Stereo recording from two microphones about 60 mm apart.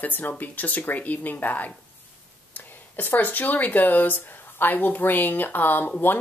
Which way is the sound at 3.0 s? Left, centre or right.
Left.